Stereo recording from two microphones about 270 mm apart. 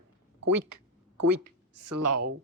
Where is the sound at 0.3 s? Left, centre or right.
Right.